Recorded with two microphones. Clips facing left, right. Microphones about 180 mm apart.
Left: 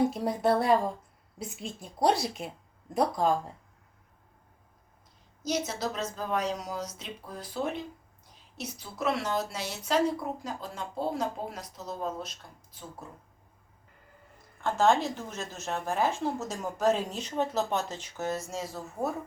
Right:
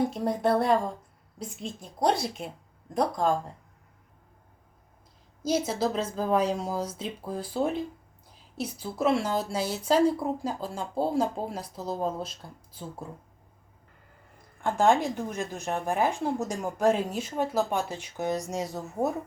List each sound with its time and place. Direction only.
0.1 s a woman's voice: 5° left (ahead or behind)
5.5 s speech: 30° right (ahead or behind)
14.6 s a woman's voice: 15° right (ahead or behind)